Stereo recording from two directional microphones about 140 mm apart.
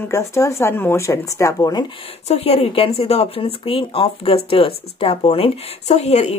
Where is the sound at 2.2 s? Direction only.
50° left (ahead or behind).